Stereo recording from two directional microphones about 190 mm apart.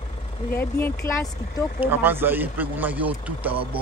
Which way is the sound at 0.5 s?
10° left (ahead or behind).